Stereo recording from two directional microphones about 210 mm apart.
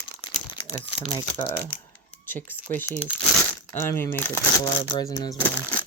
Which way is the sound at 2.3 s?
10° left (ahead or behind).